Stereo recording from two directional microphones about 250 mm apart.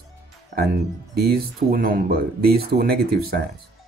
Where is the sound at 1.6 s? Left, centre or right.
Right.